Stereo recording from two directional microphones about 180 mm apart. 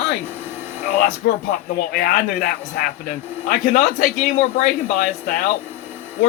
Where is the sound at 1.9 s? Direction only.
50° left (ahead or behind).